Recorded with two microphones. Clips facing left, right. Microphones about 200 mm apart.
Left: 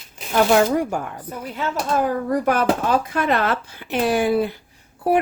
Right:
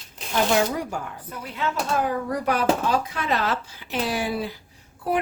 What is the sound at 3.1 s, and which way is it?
Speech, 55° left (ahead or behind).